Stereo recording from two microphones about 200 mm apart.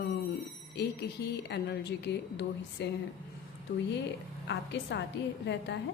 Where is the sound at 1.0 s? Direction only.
55° left (ahead or behind).